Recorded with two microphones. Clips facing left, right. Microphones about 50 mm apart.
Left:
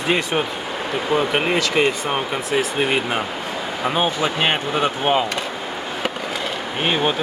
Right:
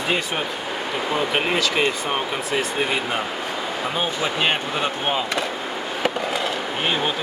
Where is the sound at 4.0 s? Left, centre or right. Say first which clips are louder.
Left 3 dB; left.